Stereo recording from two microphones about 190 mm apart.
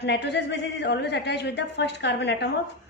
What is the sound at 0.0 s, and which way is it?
A man's voice, 65° left (ahead or behind).